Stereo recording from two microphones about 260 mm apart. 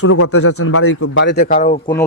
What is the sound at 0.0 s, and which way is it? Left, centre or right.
Speech, left.